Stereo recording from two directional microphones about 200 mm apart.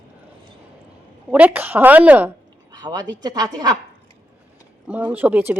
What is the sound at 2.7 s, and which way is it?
Speech, 20° right (ahead or behind).